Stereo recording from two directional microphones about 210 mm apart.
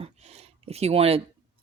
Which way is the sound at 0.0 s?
30° right (ahead or behind).